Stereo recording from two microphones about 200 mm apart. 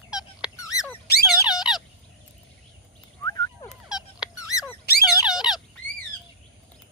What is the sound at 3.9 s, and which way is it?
Squeak, 5° right (ahead or behind).